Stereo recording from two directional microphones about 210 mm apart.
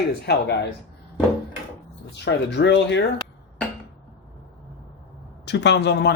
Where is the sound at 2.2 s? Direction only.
55° left (ahead or behind).